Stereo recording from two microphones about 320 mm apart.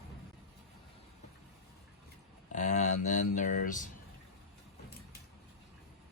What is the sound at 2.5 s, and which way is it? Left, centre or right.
Speech, left.